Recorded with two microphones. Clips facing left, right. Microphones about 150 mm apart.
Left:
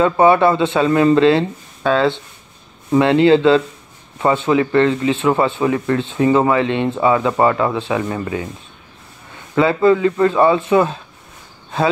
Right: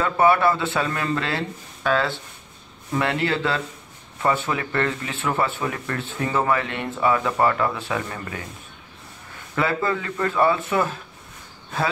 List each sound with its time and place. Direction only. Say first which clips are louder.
0.0 s speech: left 6 dB; 20° left (ahead or behind)
9.6 s speech: left 10 dB; 25° left (ahead or behind)